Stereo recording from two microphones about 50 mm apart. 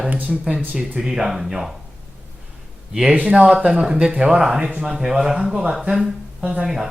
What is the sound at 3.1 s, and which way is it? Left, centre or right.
Speech, right.